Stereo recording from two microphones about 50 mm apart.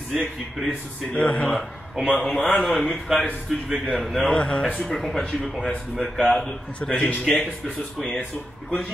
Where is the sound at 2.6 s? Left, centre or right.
Centre.